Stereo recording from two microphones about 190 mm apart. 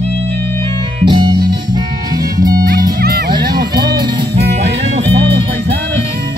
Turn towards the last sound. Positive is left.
turn(degrees=-25)  # may be behind; listen again after turning